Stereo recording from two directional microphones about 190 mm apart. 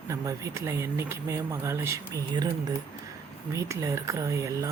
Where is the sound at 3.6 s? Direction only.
15° right (ahead or behind).